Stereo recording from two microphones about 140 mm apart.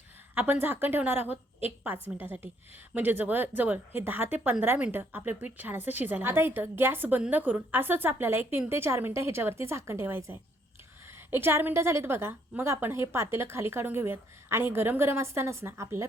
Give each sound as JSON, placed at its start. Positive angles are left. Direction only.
{"t": 0.3, "sound": "a woman's voice", "side_deg": -15}